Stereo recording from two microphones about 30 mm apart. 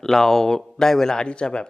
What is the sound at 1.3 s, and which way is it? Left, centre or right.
Speech, left.